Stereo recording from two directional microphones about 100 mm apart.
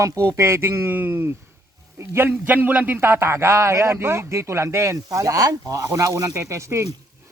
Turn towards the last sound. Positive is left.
turn(degrees=-30)  # may be behind; listen again after turning